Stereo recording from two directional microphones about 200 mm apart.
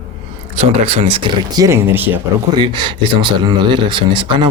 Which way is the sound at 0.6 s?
30° right (ahead or behind).